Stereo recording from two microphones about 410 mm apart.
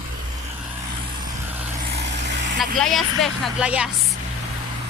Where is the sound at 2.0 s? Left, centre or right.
Right.